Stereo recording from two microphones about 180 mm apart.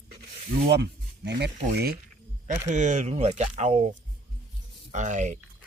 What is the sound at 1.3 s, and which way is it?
Speech, 70° right (ahead or behind).